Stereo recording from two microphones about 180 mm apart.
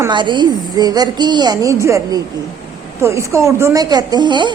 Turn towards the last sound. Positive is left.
turn(degrees=-25)  # may be behind; listen again after turning